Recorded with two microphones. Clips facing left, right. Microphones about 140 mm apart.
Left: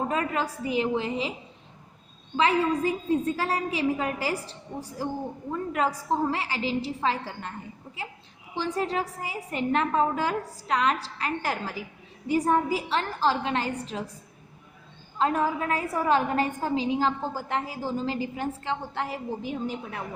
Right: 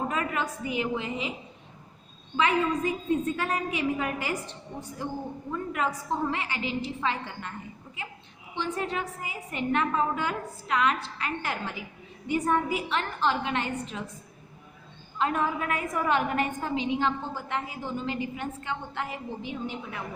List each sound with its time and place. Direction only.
0.1 s a woman's voice: 35° left (ahead or behind)
2.3 s a woman's voice: 30° left (ahead or behind)
8.5 s a woman's voice: 35° left (ahead or behind)
15.2 s a woman's voice: 35° left (ahead or behind)